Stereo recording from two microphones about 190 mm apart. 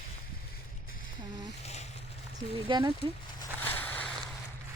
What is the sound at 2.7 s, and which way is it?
Speech, 25° right (ahead or behind).